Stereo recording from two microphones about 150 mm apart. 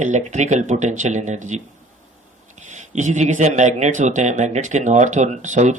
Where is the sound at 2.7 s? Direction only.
55° right (ahead or behind).